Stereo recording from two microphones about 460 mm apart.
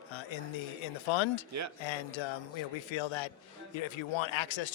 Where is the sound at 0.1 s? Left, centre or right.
Left.